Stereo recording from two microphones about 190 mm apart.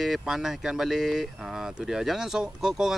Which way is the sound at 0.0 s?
Centre (ahead or behind).